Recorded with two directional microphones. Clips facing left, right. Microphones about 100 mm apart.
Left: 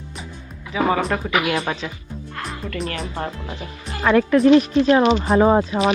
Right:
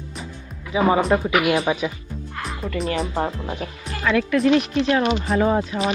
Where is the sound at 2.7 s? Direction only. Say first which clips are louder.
Right 5 dB; centre (ahead or behind).